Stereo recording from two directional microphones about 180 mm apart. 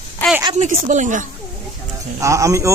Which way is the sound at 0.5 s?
45° right (ahead or behind).